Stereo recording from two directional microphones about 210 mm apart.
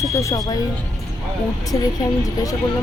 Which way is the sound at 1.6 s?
15° left (ahead or behind).